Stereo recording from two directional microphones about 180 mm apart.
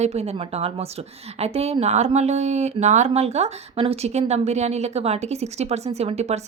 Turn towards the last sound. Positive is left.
turn(degrees=-35)  # may be behind; listen again after turning